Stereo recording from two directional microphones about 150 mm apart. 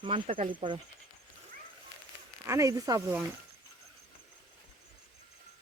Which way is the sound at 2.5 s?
20° right (ahead or behind).